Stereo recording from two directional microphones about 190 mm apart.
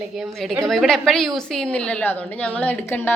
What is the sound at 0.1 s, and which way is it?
A woman's voice, centre (ahead or behind).